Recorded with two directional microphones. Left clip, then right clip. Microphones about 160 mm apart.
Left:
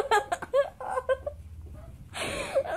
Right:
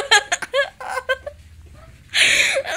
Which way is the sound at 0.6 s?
30° right (ahead or behind).